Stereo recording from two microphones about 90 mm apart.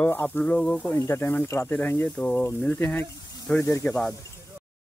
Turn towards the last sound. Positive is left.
turn(degrees=15)  # may be behind; listen again after turning